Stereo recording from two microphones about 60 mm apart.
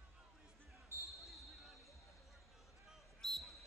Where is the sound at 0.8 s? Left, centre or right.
Right.